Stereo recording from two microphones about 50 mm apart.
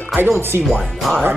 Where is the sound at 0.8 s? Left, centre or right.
Centre.